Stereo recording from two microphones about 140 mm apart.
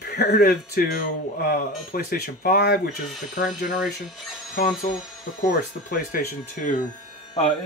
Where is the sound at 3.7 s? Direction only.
5° right (ahead or behind).